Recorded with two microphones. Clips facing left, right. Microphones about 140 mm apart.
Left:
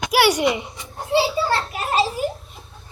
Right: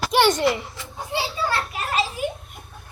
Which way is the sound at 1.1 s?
20° left (ahead or behind).